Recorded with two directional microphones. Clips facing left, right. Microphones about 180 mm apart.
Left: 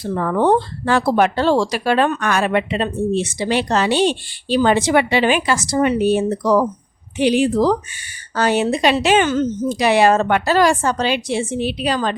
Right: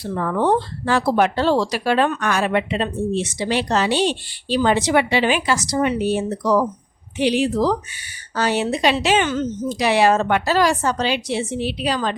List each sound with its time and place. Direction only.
0.0 s speech: 50° left (ahead or behind)